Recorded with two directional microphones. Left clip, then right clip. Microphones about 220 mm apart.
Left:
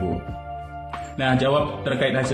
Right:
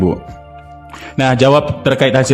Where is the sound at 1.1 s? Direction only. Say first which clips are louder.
Right 10 dB; 50° right (ahead or behind).